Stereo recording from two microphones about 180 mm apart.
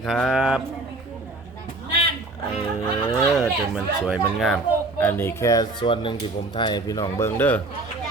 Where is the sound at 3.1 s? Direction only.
5° right (ahead or behind).